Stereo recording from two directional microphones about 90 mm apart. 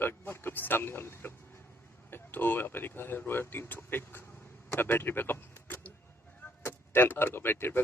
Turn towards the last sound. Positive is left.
turn(degrees=25)  # may be behind; listen again after turning